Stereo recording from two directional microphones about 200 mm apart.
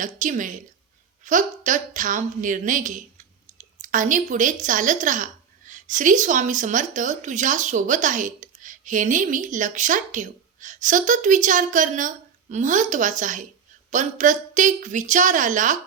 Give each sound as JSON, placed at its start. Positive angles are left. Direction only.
{"t": 0.0, "sound": "a woman's voice", "side_deg": -40}